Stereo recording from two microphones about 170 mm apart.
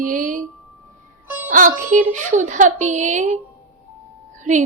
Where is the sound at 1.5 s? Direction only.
50° right (ahead or behind).